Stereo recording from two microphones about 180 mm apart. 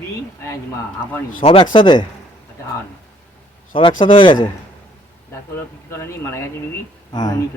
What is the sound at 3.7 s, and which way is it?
Speech, 30° left (ahead or behind).